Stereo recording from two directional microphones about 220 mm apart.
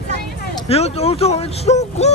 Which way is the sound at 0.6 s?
25° left (ahead or behind).